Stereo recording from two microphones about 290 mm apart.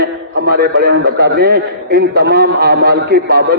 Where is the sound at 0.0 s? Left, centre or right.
Right.